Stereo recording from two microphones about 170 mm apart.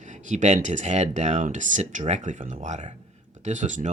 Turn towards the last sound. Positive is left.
turn(degrees=-45)  # may be behind; listen again after turning